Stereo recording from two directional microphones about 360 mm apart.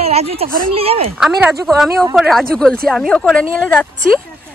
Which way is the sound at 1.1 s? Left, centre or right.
Centre.